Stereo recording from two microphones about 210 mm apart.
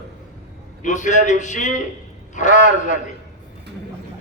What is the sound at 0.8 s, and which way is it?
A man's voice, 35° left (ahead or behind).